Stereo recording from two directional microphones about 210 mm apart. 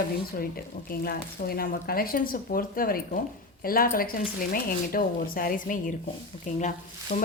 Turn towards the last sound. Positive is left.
turn(degrees=35)  # may be behind; listen again after turning